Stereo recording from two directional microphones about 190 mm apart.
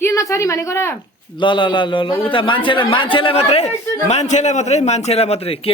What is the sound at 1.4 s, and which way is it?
A man's voice, 25° left (ahead or behind).